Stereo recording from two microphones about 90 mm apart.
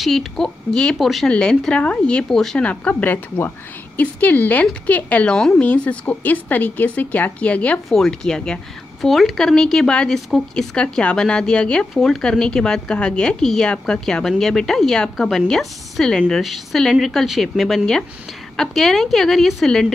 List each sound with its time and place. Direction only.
0.0 s speech: 5° left (ahead or behind)
1.3 s speech: 10° left (ahead or behind)